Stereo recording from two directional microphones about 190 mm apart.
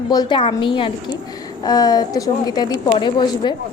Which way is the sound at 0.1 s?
20° left (ahead or behind).